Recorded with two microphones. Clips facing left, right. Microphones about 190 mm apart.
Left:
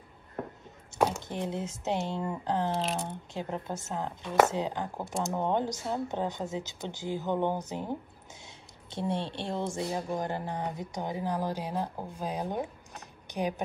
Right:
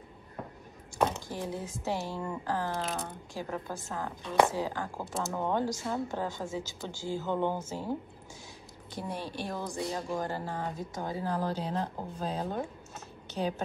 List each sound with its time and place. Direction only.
0.9 s a sound: 5° left (ahead or behind)
1.3 s speech: 20° left (ahead or behind)
8.9 s speech: 25° left (ahead or behind)